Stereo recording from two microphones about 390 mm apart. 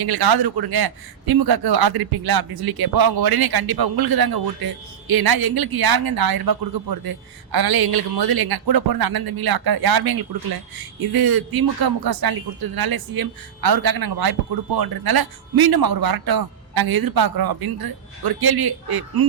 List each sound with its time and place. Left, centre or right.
0.0 s a man's voice: right